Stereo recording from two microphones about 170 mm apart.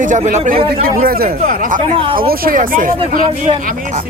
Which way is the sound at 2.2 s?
60° right (ahead or behind).